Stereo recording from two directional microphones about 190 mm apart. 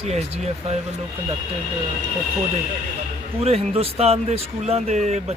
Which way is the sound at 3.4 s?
35° right (ahead or behind).